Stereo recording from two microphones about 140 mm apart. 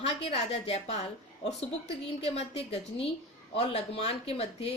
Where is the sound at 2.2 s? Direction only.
50° left (ahead or behind).